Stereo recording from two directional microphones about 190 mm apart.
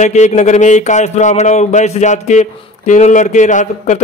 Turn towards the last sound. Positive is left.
turn(degrees=40)  # may be behind; listen again after turning